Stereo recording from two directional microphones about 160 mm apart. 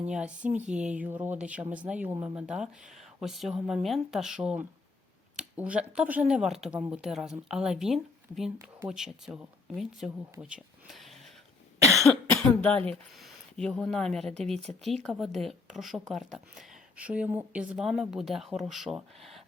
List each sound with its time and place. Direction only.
0.1 s speech: 5° right (ahead or behind)
10.4 s a sound: 5° right (ahead or behind)
11.9 s cough: centre (ahead or behind)
12.9 s speech: centre (ahead or behind)